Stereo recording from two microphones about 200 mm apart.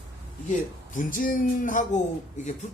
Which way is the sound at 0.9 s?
45° left (ahead or behind).